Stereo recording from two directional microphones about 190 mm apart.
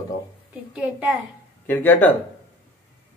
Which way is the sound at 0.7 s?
5° right (ahead or behind).